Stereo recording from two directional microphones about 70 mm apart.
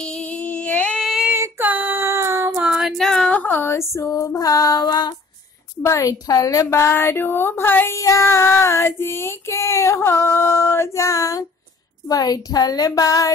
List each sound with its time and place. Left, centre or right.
0.0 s female singing: centre
1.6 s female singing: right
2.0 s a sound: right
2.6 s music: centre
3.0 s a sound: centre
3.3 s a sound: left
3.7 s female singing: left
5.8 s female singing: left
7.9 s female singing: left
12.1 s female singing: left